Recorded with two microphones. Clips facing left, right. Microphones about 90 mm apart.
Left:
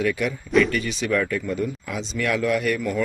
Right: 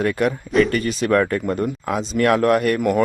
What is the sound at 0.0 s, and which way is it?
Speech, 45° right (ahead or behind).